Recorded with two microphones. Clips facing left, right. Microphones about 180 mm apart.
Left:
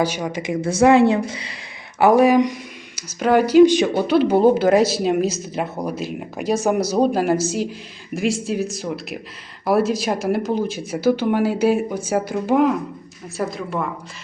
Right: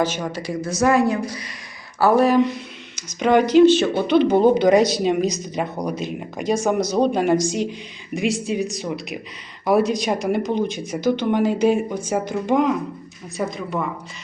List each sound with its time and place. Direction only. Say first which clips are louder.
0.0 s speech: left 1 dB; 10° left (ahead or behind); by 1.5 s 30° left (ahead or behind)
2.0 s speech: left 2 dB; 15° left (ahead or behind); by 13.8 s centre (ahead or behind)